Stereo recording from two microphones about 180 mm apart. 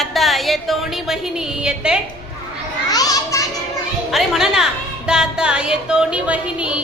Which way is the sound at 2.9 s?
20° left (ahead or behind).